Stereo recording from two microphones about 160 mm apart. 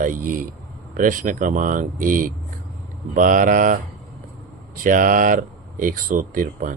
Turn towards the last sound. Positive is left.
turn(degrees=-55)  # may be behind; listen again after turning